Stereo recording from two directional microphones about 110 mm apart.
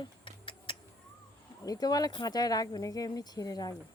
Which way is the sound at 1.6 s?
35° left (ahead or behind).